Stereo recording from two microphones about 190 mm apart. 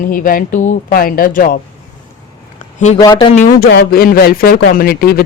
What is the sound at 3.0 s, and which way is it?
Speech, 25° left (ahead or behind).